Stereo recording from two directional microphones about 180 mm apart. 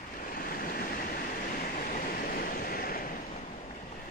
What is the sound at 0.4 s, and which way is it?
Train, 55° left (ahead or behind).